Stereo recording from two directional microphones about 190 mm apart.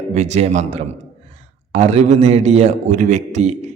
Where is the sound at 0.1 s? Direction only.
35° right (ahead or behind).